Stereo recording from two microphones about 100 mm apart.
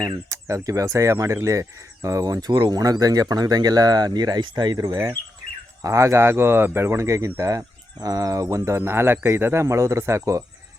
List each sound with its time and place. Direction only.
0.0 s speech: 35° right (ahead or behind)
5.8 s speech: 30° right (ahead or behind)